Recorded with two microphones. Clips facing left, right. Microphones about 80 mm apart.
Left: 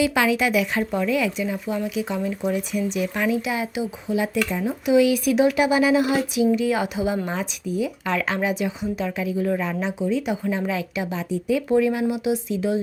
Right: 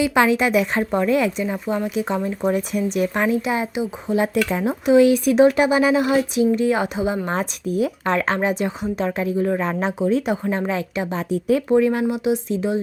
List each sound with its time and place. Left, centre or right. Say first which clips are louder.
0.0 s a woman's voice: right 3 dB; right
4.9 s a woman's voice: right 4 dB; right
7.3 s speech: right 4 dB; right
8.0 s a woman's voice: right 3 dB; right
9.4 s speech: right 2 dB; right
9.8 s speech: right 4 dB; right
10.6 s a woman's voice: right 2 dB; right
11.3 s speech: right 4 dB; right
11.7 s a woman's voice: right 1 dB; right